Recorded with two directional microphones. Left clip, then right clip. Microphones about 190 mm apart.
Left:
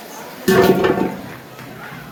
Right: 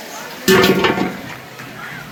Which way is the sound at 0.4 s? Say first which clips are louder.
Right 1 dB; 35° left (ahead or behind).